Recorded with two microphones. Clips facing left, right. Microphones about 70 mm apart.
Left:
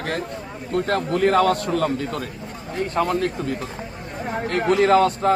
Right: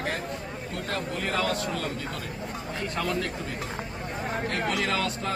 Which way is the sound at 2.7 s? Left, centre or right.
Left.